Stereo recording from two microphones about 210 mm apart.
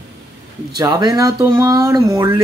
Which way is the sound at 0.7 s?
20° right (ahead or behind).